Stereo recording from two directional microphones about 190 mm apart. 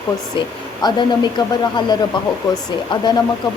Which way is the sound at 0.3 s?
25° left (ahead or behind).